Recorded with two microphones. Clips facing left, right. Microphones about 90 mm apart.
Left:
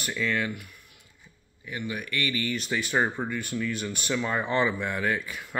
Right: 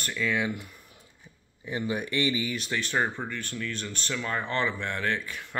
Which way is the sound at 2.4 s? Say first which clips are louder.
Left 2 dB; centre (ahead or behind).